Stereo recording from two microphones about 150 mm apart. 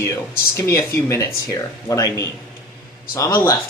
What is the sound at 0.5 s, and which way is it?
Speech, 20° left (ahead or behind).